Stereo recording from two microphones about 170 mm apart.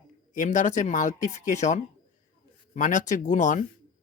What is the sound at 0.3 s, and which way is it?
Speech, 50° left (ahead or behind).